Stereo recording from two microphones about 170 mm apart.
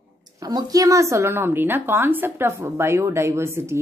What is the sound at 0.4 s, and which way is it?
A woman's voice, 20° right (ahead or behind).